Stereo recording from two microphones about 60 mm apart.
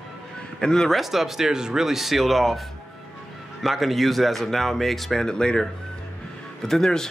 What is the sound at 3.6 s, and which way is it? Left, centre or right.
Speech, centre.